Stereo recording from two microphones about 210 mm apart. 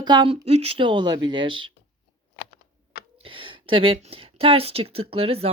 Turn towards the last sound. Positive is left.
turn(degrees=-25)  # may be behind; listen again after turning